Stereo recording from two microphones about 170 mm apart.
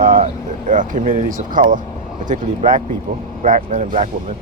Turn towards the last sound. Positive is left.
turn(degrees=-45)  # may be behind; listen again after turning